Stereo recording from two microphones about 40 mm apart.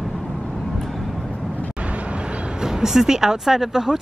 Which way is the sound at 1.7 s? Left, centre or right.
Right.